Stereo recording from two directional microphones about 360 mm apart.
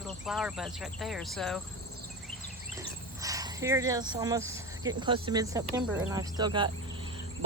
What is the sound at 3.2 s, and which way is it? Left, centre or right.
Speech, centre.